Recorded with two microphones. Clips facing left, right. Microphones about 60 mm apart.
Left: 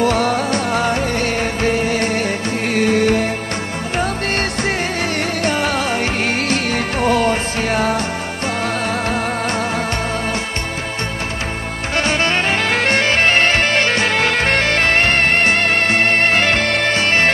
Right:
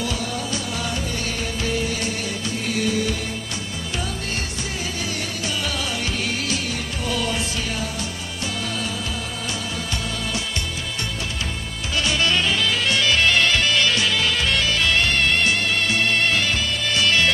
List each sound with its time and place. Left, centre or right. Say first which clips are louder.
0.0 s music: left 11 dB; left
12.0 s music: left 4 dB; left
16.9 s music: even; left